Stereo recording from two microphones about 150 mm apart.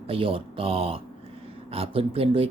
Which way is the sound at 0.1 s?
40° right (ahead or behind).